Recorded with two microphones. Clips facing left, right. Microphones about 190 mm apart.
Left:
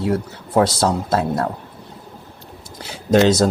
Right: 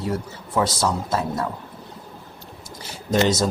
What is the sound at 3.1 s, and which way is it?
Speech, 70° left (ahead or behind).